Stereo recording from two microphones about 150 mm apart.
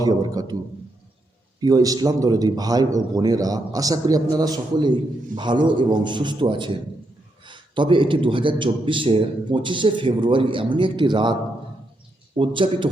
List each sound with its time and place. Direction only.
0.0 s a man's voice: 25° right (ahead or behind)
1.6 s a man's voice: 25° right (ahead or behind)
12.4 s a man's voice: 35° right (ahead or behind)